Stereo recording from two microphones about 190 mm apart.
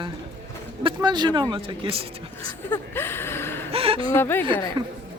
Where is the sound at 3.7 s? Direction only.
30° right (ahead or behind).